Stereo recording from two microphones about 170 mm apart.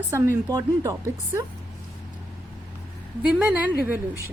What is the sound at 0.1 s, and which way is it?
Speech, 15° right (ahead or behind).